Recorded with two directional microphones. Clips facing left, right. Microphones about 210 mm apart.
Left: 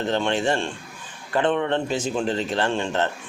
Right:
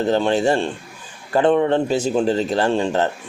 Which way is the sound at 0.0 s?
35° right (ahead or behind).